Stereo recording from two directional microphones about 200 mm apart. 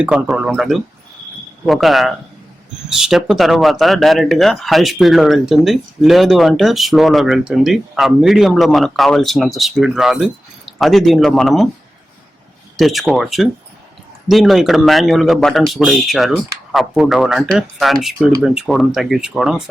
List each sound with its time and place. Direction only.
0.0 s speech: 5° right (ahead or behind)
12.7 s speech: centre (ahead or behind)